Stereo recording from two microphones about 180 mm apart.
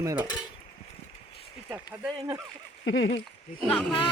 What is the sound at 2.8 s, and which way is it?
Speech, 85° left.